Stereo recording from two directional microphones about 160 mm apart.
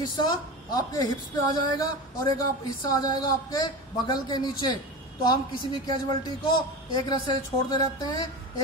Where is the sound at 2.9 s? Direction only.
25° left (ahead or behind).